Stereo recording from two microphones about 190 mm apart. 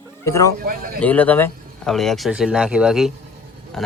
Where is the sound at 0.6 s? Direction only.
50° right (ahead or behind).